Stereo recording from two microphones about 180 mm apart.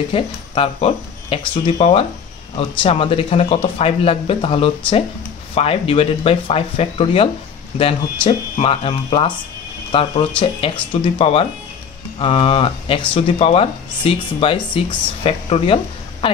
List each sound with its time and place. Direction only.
0.1 s speech: 30° left (ahead or behind)